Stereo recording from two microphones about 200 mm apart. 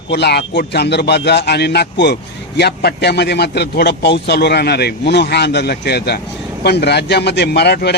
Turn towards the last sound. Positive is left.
turn(degrees=55)  # may be behind; listen again after turning